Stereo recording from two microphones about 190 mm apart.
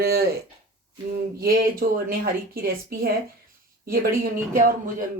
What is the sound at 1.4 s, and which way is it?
Speech, 50° right (ahead or behind).